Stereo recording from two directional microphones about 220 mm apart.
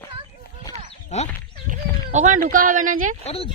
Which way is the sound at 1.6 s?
35° right (ahead or behind).